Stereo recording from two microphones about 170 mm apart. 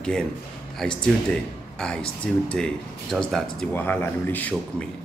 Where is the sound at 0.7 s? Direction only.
5° left (ahead or behind).